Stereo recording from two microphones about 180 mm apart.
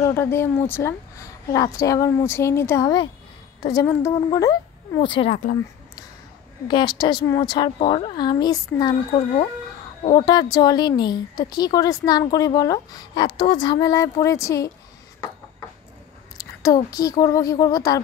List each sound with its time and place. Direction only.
0.0 s a woman's voice: 15° left (ahead or behind)
5.3 s speech: 50° left (ahead or behind)
6.7 s a woman's voice: 25° left (ahead or behind)
10.0 s a woman's voice: 25° left (ahead or behind)
16.3 s a woman's voice: 20° left (ahead or behind)